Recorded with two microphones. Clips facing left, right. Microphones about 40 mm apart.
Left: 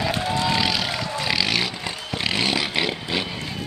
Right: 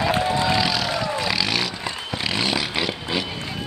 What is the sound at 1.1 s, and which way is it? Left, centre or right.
Vehicle, centre.